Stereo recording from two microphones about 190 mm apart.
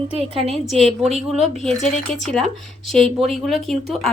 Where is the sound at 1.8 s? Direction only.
5° left (ahead or behind).